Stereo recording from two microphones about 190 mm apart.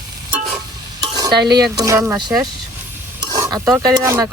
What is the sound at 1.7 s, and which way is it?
Speech, 15° right (ahead or behind).